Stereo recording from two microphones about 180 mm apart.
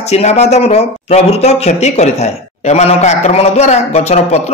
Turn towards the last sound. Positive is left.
turn(degrees=35)  # may be behind; listen again after turning